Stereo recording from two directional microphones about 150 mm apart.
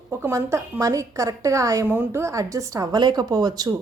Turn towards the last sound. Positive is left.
turn(degrees=-25)  # may be behind; listen again after turning